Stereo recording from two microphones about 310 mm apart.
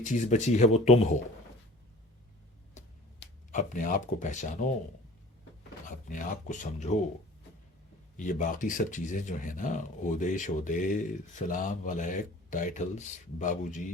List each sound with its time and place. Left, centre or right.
0.0 s speech: left
2.7 s a sound: left
6.1 s speech: left
8.1 s speech: left